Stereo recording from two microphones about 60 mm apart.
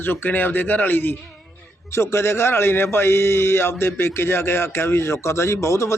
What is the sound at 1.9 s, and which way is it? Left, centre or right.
Speech, left.